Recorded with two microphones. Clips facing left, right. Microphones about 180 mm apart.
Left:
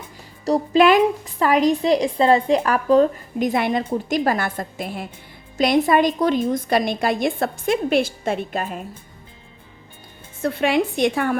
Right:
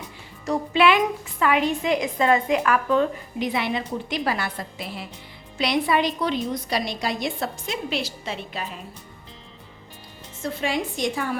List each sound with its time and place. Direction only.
0.4 s a woman's voice: 35° left (ahead or behind)
10.4 s a woman's voice: 65° left (ahead or behind)